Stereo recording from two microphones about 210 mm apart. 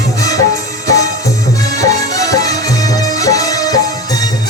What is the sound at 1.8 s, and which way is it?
Music, 15° left (ahead or behind).